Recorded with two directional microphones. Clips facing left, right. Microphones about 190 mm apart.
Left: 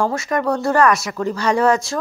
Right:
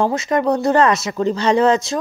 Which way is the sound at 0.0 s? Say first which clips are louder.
Right 2 dB; 20° right (ahead or behind).